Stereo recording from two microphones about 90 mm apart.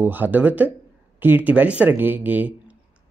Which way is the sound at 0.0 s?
20° right (ahead or behind).